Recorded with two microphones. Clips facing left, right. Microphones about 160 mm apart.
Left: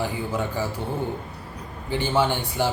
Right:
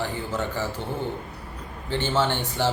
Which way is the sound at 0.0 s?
10° left (ahead or behind).